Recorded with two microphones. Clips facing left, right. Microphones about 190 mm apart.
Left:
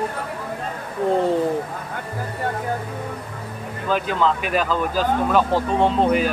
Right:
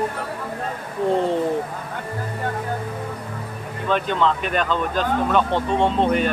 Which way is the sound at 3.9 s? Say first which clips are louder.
Even; 5° left (ahead or behind).